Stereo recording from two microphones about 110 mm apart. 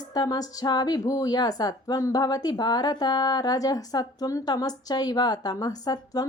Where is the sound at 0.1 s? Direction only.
35° left (ahead or behind).